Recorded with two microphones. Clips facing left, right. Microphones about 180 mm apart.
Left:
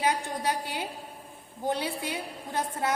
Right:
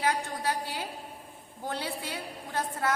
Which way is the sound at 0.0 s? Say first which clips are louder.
Left 2 dB; 20° left (ahead or behind).